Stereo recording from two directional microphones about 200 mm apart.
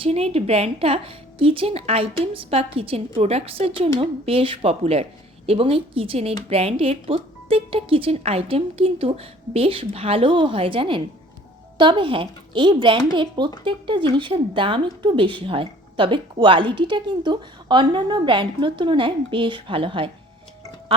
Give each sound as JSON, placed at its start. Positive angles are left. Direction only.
{"t": 0.0, "sound": "speech", "side_deg": -30}